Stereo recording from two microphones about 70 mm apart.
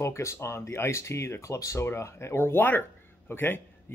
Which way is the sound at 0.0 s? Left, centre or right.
Left.